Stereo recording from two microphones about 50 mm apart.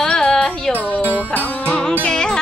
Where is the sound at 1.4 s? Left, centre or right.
Left.